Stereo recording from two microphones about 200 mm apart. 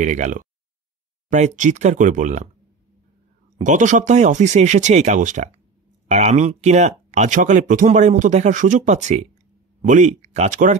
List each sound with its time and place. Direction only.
0.0 s speech: 40° right (ahead or behind)
3.5 s speech: 40° right (ahead or behind)